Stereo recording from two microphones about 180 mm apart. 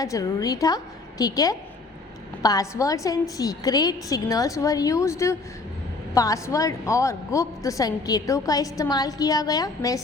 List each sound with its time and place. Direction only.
0.0 s a woman's voice: 20° left (ahead or behind)